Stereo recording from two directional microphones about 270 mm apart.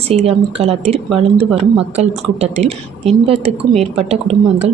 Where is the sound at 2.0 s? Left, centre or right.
Right.